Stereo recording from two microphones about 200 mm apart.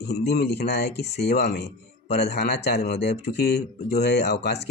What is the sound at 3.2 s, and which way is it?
Speech, 55° left (ahead or behind).